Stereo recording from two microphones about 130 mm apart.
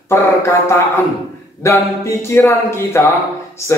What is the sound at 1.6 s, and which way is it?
Speech, 20° left (ahead or behind).